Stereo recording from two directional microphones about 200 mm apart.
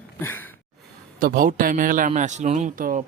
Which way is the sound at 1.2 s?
45° right (ahead or behind).